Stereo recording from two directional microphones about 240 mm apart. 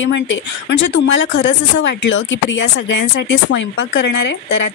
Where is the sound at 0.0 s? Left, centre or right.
Left.